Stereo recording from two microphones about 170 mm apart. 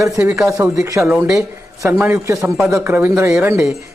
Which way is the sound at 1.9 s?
15° right (ahead or behind).